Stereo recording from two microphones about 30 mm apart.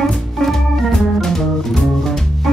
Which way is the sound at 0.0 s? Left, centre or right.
Centre.